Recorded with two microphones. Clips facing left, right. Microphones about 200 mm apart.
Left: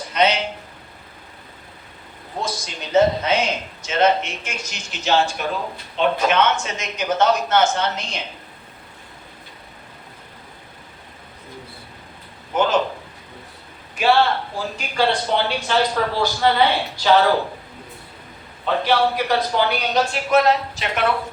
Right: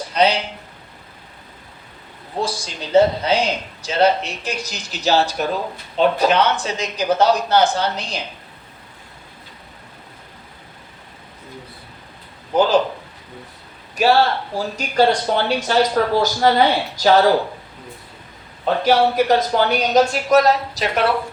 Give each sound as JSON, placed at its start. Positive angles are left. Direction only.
{"t": 0.1, "sound": "a sound", "side_deg": -35}
{"t": 2.4, "sound": "a man's voice", "side_deg": -30}
{"t": 12.5, "sound": "a man's voice", "side_deg": -35}
{"t": 13.9, "sound": "speech", "side_deg": -40}
{"t": 18.6, "sound": "a man's voice", "side_deg": -45}